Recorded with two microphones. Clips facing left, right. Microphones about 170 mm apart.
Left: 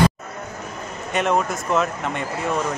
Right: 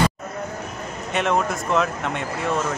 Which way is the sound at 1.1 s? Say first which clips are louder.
Left 1 dB; centre (ahead or behind).